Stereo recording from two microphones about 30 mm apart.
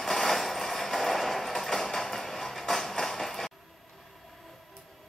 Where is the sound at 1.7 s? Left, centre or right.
Centre.